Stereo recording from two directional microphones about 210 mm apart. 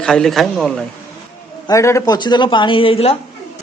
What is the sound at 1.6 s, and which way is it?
Speech, 15° left (ahead or behind).